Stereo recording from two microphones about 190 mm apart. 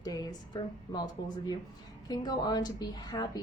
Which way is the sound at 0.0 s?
20° left (ahead or behind).